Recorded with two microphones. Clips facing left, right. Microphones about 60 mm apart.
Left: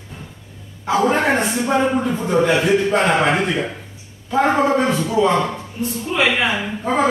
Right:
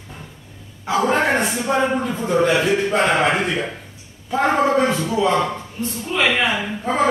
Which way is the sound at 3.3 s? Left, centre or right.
Centre.